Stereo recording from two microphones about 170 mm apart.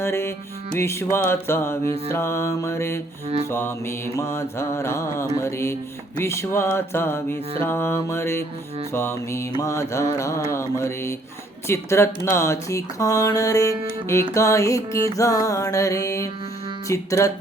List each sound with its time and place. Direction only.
0.0 s music: 15° left (ahead or behind)
0.8 s mantra: 15° left (ahead or behind)
11.7 s speech: 15° left (ahead or behind)
14.3 s mantra: 15° left (ahead or behind)
15.1 s speech: 20° left (ahead or behind)
16.9 s mantra: 15° left (ahead or behind)